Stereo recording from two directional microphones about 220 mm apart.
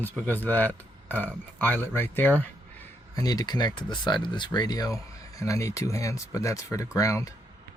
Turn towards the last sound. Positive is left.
turn(degrees=15)  # may be behind; listen again after turning